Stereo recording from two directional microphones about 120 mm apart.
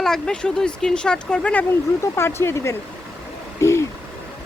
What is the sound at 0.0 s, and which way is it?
Speech, 5° left (ahead or behind).